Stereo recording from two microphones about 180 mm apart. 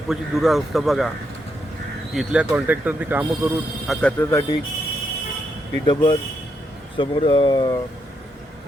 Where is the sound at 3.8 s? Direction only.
Centre (ahead or behind).